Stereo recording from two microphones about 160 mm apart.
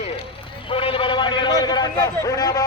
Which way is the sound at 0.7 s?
35° left (ahead or behind).